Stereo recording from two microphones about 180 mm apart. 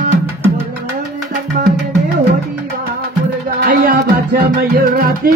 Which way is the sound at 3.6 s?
55° right (ahead or behind).